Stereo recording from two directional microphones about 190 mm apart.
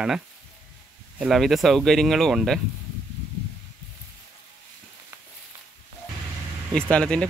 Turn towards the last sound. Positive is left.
turn(degrees=5)  # may be behind; listen again after turning